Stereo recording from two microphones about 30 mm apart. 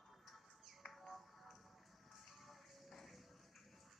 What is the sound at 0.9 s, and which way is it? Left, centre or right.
Music, centre.